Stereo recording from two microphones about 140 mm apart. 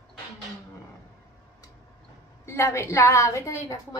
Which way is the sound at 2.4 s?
20° left (ahead or behind).